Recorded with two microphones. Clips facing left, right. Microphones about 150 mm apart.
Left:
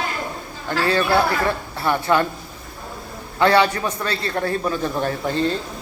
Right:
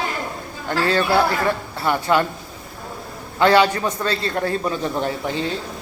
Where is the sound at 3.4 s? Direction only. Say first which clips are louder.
Right 1 dB; 25° right (ahead or behind).